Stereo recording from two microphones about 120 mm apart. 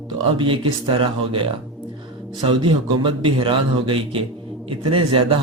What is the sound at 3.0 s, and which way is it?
A man's voice, 45° right (ahead or behind).